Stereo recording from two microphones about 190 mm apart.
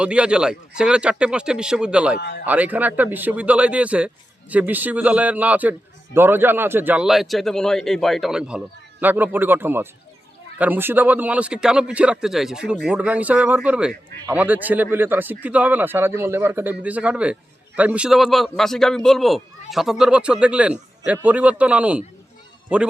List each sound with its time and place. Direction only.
0.0 s a man's voice: 5° right (ahead or behind)
2.1 s a man's voice: 65° left (ahead or behind)
2.5 s a man's voice: 10° right (ahead or behind)